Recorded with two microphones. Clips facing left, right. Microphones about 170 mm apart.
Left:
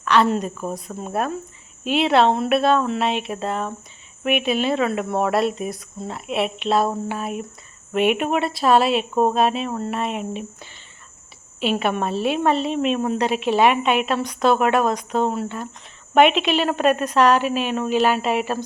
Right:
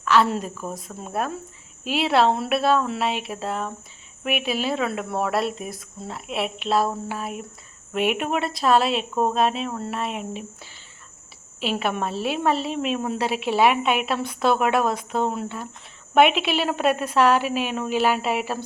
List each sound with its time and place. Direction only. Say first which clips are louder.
0.0 s a woman's voice: left 2 dB; 5° right (ahead or behind)
0.5 s speech: left 4 dB; 25° left (ahead or behind)
1.8 s a woman's voice: left 3 dB; 5° right (ahead or behind)